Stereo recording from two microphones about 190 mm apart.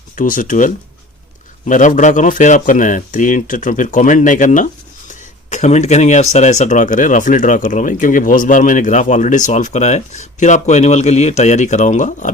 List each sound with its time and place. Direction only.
0.2 s speech: 45° left (ahead or behind)